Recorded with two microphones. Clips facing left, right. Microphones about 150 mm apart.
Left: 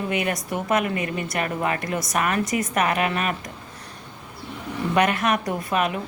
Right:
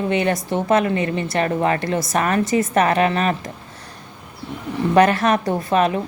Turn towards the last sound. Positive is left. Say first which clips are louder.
# right 6 dB
turn(degrees=-30)  # may be behind; listen again after turning